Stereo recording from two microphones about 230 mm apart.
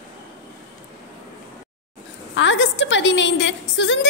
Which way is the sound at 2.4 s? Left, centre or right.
Left.